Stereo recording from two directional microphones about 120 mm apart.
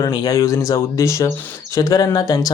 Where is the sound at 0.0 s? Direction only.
35° left (ahead or behind).